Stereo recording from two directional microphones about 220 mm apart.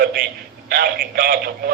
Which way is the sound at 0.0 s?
45° right (ahead or behind).